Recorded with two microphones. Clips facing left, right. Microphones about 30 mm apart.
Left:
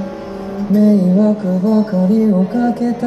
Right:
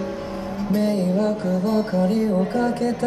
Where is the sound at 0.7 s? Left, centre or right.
Right.